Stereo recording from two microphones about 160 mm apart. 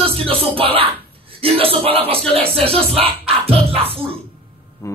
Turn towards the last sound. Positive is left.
turn(degrees=-35)  # may be behind; listen again after turning